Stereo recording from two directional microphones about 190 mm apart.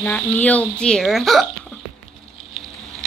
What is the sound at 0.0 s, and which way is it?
A woman's voice, 5° left (ahead or behind).